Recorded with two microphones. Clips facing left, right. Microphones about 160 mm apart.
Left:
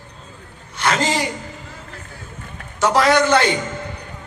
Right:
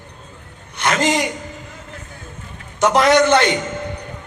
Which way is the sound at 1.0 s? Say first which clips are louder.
Right 3 dB; 20° right (ahead or behind).